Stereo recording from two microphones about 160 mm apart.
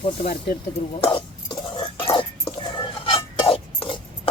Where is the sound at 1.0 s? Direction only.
35° left (ahead or behind).